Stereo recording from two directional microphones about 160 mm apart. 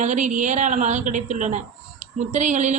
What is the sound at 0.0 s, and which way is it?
A woman's voice, 50° right (ahead or behind).